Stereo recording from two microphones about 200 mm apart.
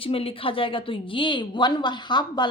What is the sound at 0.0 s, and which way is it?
A woman's voice, 30° left (ahead or behind).